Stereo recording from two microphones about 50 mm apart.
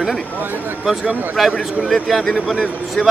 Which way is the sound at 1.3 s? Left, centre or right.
Centre.